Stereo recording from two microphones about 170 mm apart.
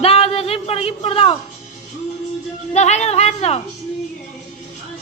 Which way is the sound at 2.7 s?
40° left (ahead or behind).